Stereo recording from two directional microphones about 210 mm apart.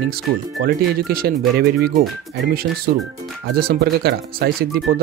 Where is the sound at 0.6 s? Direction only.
45° right (ahead or behind).